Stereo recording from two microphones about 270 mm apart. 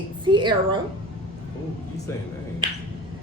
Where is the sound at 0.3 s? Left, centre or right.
Centre.